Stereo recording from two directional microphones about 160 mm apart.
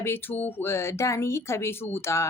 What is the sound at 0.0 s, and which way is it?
A woman's voice, 15° left (ahead or behind).